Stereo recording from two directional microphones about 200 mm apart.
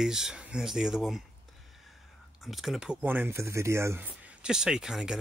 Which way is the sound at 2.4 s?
Centre (ahead or behind).